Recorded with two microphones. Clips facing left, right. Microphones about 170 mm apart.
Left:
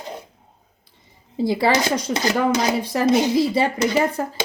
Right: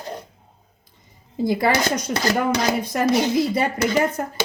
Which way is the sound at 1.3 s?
25° left (ahead or behind).